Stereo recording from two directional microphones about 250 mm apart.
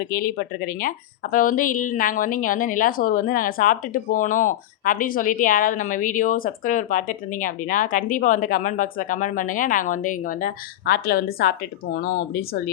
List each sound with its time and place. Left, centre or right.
0.1 s speech: left